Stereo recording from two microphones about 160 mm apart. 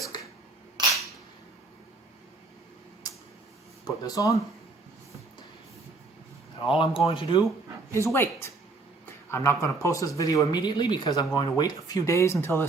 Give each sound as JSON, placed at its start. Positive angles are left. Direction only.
{"t": 3.1, "sound": "tick-tock", "side_deg": 25}
{"t": 3.8, "sound": "speech", "side_deg": 25}
{"t": 6.6, "sound": "speech", "side_deg": 30}
{"t": 7.9, "sound": "speech", "side_deg": 15}